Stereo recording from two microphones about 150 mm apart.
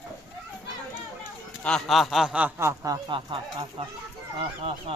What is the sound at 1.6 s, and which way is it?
Speech, 5° left (ahead or behind).